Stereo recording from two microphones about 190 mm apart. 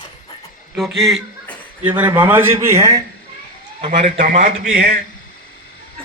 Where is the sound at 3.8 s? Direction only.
35° right (ahead or behind).